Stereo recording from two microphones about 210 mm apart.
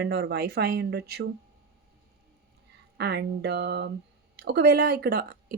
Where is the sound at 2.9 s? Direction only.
50° right (ahead or behind).